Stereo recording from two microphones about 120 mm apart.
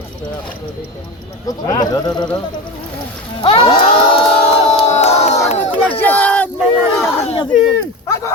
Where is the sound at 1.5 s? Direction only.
30° left (ahead or behind).